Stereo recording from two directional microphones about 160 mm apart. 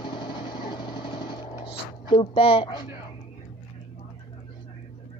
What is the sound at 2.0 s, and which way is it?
Speech, 35° left (ahead or behind).